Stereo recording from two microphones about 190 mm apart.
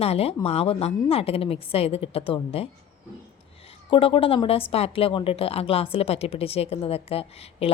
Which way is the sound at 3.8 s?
25° left (ahead or behind).